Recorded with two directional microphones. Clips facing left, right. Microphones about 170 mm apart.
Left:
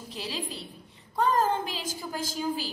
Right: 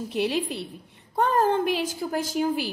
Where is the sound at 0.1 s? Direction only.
60° right (ahead or behind).